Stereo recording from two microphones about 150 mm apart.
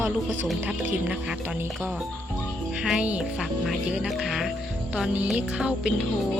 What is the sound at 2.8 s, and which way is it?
Speech, 5° right (ahead or behind).